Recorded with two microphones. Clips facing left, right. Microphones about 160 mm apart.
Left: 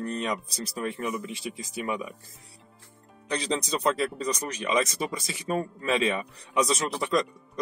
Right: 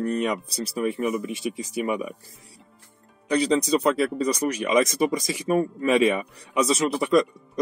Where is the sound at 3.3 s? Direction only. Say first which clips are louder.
Right 8 dB; 10° right (ahead or behind).